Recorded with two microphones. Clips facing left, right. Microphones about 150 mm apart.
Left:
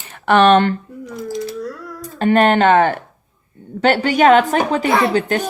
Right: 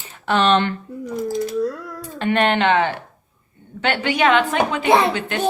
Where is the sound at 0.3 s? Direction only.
55° left (ahead or behind).